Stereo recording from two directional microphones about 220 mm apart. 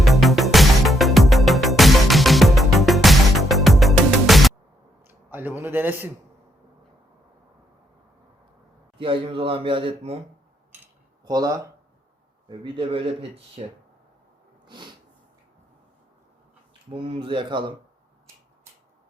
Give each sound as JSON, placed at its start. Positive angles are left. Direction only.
{"t": 0.0, "sound": "music", "side_deg": 0}
{"t": 5.0, "sound": "a sound", "side_deg": -10}
{"t": 9.0, "sound": "a man's voice", "side_deg": -25}
{"t": 11.3, "sound": "a man's voice", "side_deg": -15}
{"t": 14.7, "sound": "a sound", "side_deg": -20}
{"t": 16.9, "sound": "a man's voice", "side_deg": -25}